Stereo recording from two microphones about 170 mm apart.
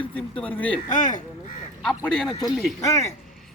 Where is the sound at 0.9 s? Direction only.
50° left (ahead or behind).